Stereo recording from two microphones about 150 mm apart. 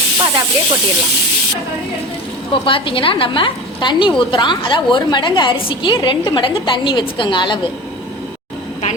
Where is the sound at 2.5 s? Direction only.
35° left (ahead or behind).